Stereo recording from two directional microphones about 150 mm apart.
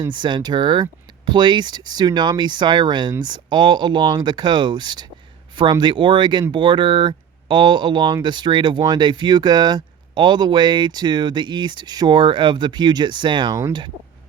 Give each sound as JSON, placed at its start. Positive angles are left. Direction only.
{"t": 0.0, "sound": "speech", "side_deg": -30}